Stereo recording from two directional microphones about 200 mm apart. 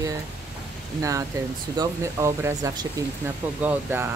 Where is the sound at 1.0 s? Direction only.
15° right (ahead or behind).